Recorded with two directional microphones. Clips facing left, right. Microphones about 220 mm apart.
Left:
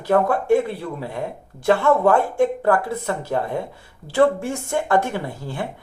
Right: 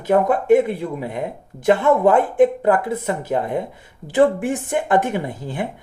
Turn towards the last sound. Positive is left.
turn(degrees=-20)  # may be behind; listen again after turning